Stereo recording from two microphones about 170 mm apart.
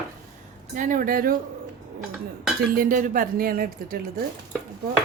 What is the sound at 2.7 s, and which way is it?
Speech, 55° right (ahead or behind).